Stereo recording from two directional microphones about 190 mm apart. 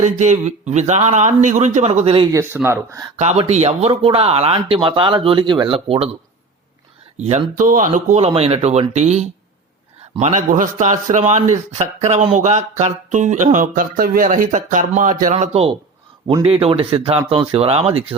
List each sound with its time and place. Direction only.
0.0 s speech: 40° right (ahead or behind)
2.4 s speech: 10° right (ahead or behind)
3.2 s speech: 35° right (ahead or behind)
7.2 s speech: 35° right (ahead or behind)